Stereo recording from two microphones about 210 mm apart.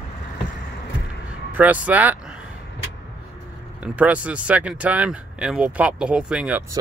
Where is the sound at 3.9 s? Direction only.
5° right (ahead or behind).